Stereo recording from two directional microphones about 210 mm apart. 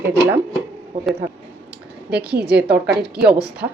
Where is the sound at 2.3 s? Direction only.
50° right (ahead or behind).